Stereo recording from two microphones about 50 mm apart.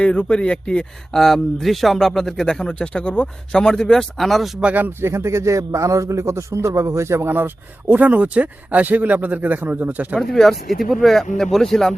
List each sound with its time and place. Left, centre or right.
0.0 s speech: left
1.1 s speech: centre
4.9 s a man's voice: right
7.3 s speech: right
10.2 s speech: centre